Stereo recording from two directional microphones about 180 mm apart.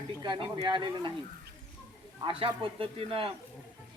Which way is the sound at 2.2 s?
30° right (ahead or behind).